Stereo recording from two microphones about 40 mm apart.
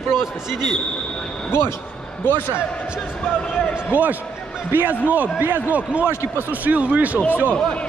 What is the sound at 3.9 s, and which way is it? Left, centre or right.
Speech, right.